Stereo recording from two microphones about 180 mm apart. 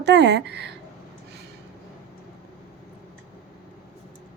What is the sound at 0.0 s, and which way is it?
Speech, 70° right (ahead or behind).